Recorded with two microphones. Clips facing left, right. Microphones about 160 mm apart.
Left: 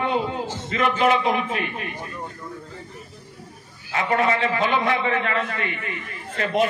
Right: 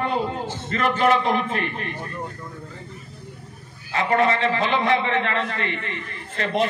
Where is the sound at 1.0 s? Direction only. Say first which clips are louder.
Right 1 dB; 35° right (ahead or behind).